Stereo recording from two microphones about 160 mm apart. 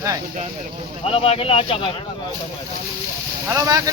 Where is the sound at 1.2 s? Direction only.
35° left (ahead or behind).